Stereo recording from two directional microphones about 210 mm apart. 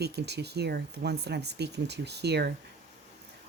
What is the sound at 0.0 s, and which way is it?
Speech, 50° right (ahead or behind).